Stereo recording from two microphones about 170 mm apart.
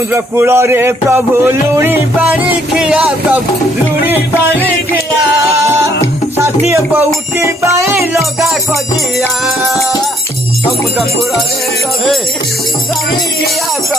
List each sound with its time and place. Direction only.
0.1 s speech: 15° right (ahead or behind)
5.5 s music: 15° right (ahead or behind)
6.7 s speech: 15° right (ahead or behind)